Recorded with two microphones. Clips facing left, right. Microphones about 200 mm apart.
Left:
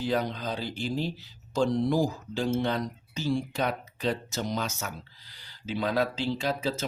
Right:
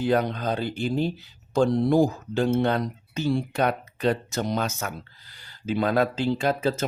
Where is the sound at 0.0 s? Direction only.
60° right (ahead or behind).